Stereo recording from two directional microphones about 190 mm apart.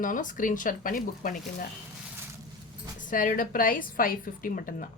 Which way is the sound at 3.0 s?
45° left (ahead or behind).